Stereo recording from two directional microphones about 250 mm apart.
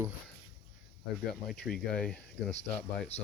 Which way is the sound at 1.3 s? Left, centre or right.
Centre.